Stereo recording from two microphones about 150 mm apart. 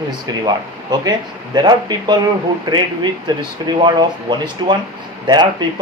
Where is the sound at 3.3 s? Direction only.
30° right (ahead or behind).